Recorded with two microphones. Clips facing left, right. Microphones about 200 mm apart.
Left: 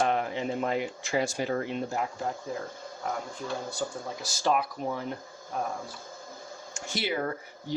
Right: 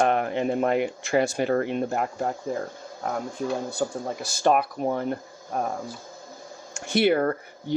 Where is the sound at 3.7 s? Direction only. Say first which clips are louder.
Right 6 dB; 55° right (ahead or behind).